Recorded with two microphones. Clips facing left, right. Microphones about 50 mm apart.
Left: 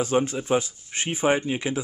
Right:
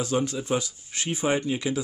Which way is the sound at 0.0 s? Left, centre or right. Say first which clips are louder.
Left 3 dB; left.